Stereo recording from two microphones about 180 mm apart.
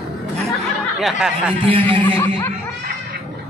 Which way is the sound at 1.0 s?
Centre (ahead or behind).